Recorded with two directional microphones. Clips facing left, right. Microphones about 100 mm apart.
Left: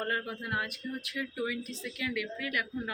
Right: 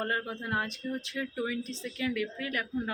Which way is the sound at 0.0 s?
25° right (ahead or behind).